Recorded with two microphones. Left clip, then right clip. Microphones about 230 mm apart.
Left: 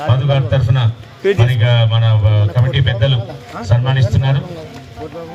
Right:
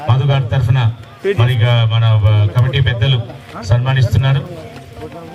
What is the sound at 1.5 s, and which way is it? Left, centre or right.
A man's voice, right.